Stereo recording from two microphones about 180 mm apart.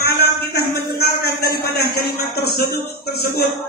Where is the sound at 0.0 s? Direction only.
60° left (ahead or behind).